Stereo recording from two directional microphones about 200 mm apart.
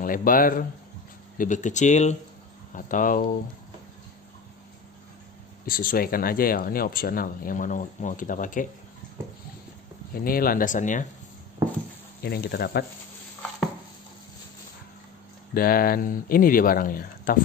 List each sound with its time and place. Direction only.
0.0 s speech: 45° left (ahead or behind)
5.7 s speech: 45° left (ahead or behind)
10.1 s speech: 45° left (ahead or behind)
12.2 s speech: 55° left (ahead or behind)
15.5 s speech: 45° left (ahead or behind)